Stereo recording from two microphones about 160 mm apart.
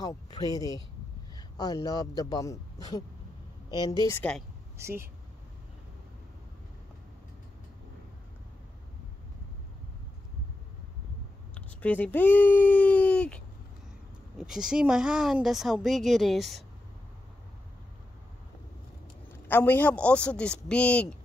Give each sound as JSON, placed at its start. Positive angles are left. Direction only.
{"t": 0.0, "sound": "a man's voice", "side_deg": 25}
{"t": 1.3, "sound": "a sound", "side_deg": 25}
{"t": 1.9, "sound": "a man's voice", "side_deg": 25}
{"t": 4.2, "sound": "speech", "side_deg": 5}
{"t": 4.7, "sound": "speech", "side_deg": -15}
{"t": 11.5, "sound": "speech", "side_deg": 10}
{"t": 14.4, "sound": "speech", "side_deg": -5}
{"t": 19.4, "sound": "a man's voice", "side_deg": 10}